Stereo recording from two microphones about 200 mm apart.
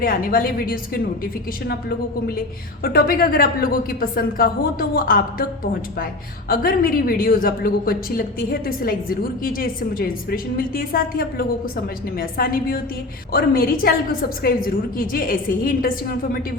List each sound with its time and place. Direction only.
0.0 s speech: 45° left (ahead or behind)
2.8 s speech: 45° left (ahead or behind)
6.5 s speech: 45° left (ahead or behind)